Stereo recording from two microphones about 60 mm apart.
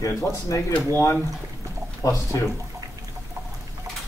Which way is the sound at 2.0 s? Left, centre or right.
Left.